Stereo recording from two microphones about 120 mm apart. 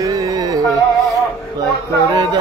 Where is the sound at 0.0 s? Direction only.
35° right (ahead or behind).